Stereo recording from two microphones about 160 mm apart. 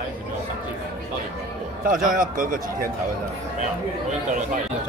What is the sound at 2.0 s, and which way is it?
Speech, 55° right (ahead or behind).